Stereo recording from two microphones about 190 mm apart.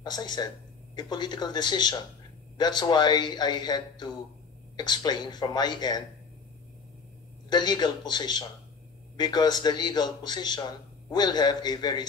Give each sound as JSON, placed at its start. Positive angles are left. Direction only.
{"t": 0.0, "sound": "a man's voice", "side_deg": 20}
{"t": 7.4, "sound": "a man's voice", "side_deg": 20}